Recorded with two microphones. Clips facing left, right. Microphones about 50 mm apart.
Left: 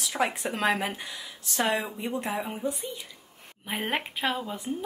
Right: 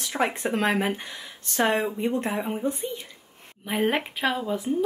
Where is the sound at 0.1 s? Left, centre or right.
Right.